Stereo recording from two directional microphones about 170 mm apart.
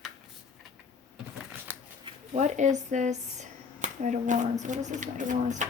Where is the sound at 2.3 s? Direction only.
45° right (ahead or behind).